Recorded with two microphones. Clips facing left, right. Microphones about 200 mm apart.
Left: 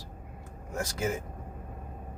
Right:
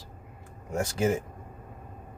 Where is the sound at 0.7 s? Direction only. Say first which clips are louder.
Right 5 dB; 25° right (ahead or behind).